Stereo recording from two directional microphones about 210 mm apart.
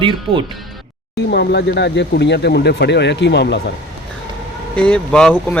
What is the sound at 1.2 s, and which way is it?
Speech, 50° left (ahead or behind).